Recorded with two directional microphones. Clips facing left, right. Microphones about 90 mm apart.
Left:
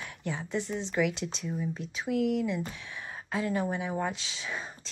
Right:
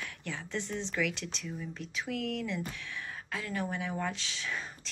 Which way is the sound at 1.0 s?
20° left (ahead or behind).